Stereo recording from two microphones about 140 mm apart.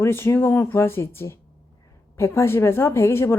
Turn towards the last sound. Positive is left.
turn(degrees=15)  # may be behind; listen again after turning